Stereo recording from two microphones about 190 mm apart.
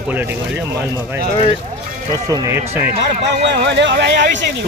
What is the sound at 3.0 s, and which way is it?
Speech, 65° right (ahead or behind).